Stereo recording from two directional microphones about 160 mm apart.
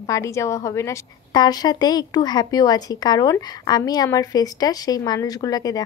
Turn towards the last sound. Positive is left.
turn(degrees=20)  # may be behind; listen again after turning